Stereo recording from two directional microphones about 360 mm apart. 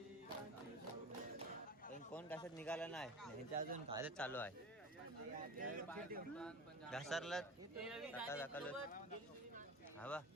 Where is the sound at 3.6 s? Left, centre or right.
Right.